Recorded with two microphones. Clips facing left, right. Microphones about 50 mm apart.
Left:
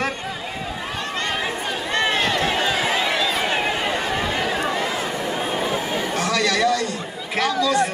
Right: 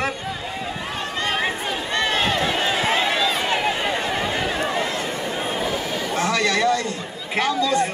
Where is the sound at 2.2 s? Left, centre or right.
Right.